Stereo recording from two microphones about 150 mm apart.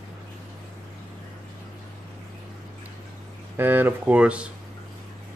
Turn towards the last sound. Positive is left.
turn(degrees=-10)  # may be behind; listen again after turning